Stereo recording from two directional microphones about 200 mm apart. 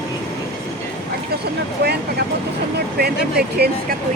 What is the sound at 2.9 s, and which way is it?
Speech, 50° right (ahead or behind).